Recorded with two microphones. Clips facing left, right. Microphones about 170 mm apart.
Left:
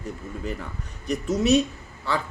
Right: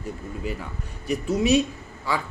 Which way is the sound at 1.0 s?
10° right (ahead or behind).